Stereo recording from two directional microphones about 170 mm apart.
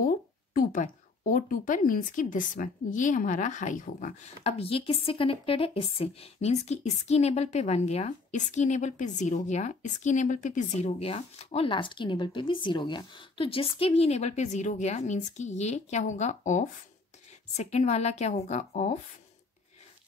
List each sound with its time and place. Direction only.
0.0 s speech: 55° left (ahead or behind)